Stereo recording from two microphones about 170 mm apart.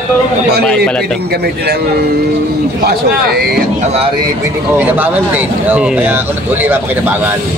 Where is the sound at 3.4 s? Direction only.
65° right (ahead or behind).